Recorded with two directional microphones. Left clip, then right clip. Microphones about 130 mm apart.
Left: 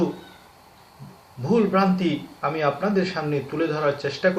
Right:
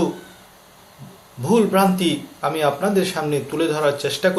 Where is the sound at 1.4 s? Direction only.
20° right (ahead or behind).